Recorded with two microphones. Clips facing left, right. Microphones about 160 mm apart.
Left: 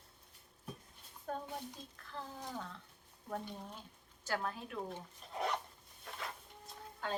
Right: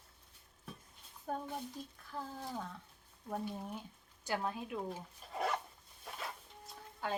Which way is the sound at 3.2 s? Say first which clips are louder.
Right 3 dB; 5° right (ahead or behind).